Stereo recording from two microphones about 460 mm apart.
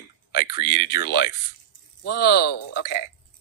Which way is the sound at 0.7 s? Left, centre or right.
Centre.